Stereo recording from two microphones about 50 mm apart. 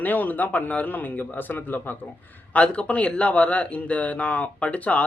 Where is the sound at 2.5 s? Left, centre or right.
Left.